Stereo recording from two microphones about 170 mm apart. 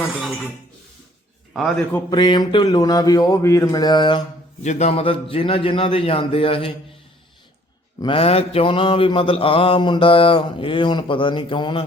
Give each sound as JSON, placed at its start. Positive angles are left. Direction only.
{"t": 1.5, "sound": "a man's voice", "side_deg": 0}
{"t": 2.0, "sound": "speech", "side_deg": 25}
{"t": 4.6, "sound": "mantra", "side_deg": 45}
{"t": 7.9, "sound": "mantra", "side_deg": 30}